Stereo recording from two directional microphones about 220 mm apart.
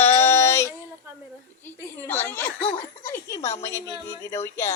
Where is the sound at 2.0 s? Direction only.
10° left (ahead or behind).